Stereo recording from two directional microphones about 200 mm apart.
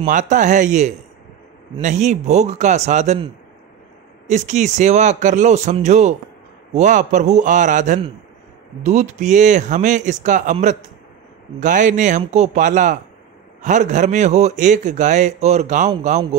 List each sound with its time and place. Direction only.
0.0 s a man's voice: 40° right (ahead or behind)
4.3 s a man's voice: 35° right (ahead or behind)